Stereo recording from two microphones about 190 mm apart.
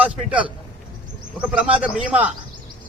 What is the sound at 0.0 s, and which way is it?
Speech, 5° right (ahead or behind).